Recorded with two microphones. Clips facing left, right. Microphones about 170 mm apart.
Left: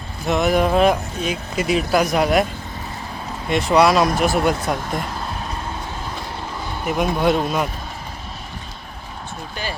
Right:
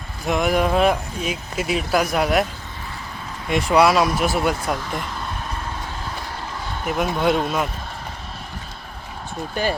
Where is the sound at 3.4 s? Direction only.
10° right (ahead or behind).